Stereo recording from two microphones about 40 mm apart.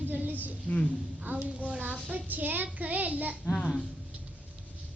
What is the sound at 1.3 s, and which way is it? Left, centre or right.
Speech, right.